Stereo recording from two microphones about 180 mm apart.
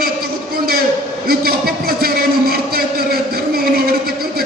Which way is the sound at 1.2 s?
55° right (ahead or behind).